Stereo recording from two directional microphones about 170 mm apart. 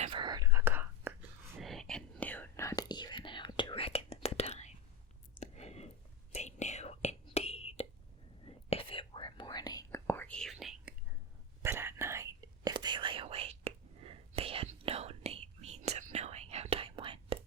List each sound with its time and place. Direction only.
0.0 s whispering: 30° right (ahead or behind)
0.5 s whispering: 10° right (ahead or behind)
1.5 s whispering: centre (ahead or behind)
11.6 s whispering: 15° right (ahead or behind); by 17.3 s 30° right (ahead or behind)